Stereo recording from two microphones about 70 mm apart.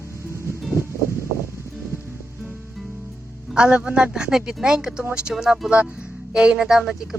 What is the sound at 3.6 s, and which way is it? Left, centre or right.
Speech, centre.